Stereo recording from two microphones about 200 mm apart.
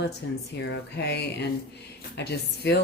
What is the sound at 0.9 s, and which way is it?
Speech, 55° left (ahead or behind).